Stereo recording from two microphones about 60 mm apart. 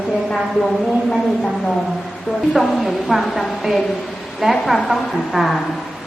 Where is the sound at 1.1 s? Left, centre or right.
Centre.